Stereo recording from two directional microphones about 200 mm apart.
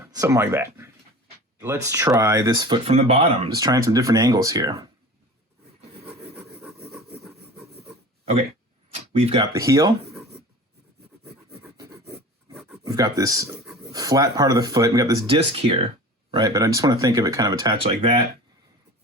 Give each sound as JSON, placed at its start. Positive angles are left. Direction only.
{"t": 0.0, "sound": "speech", "side_deg": -15}
{"t": 6.1, "sound": "filing", "side_deg": -30}
{"t": 6.3, "sound": "rub", "side_deg": -10}
{"t": 6.9, "sound": "rub", "side_deg": 0}
{"t": 8.2, "sound": "speech", "side_deg": -30}
{"t": 9.5, "sound": "speech", "side_deg": -15}
{"t": 11.6, "sound": "filing", "side_deg": -15}
{"t": 12.7, "sound": "speech", "side_deg": -15}